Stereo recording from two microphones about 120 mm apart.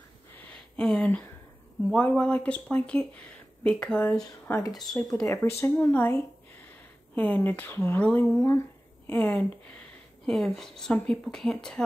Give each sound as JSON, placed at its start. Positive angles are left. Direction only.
{"t": 0.3, "sound": "a sound", "side_deg": 10}
{"t": 1.9, "sound": "a woman's voice", "side_deg": 10}
{"t": 10.2, "sound": "speech", "side_deg": 0}